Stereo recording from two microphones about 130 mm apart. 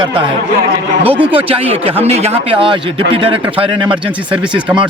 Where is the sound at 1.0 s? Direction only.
45° right (ahead or behind).